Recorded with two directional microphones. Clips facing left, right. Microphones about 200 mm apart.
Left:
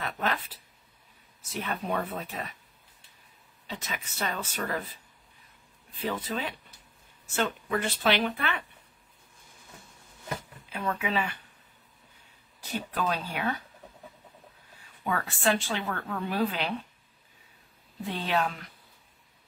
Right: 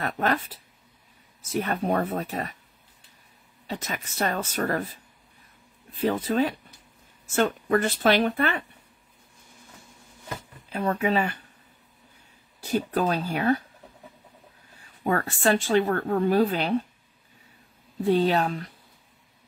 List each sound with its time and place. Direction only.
0.0 s speech: 50° right (ahead or behind)
1.5 s speech: 45° right (ahead or behind)
3.6 s speech: 45° right (ahead or behind)
5.9 s speech: 45° right (ahead or behind)
10.7 s speech: 40° right (ahead or behind)
12.6 s a woman's voice: 40° right (ahead or behind)
15.0 s a woman's voice: 45° right (ahead or behind)
18.0 s a woman's voice: 40° right (ahead or behind)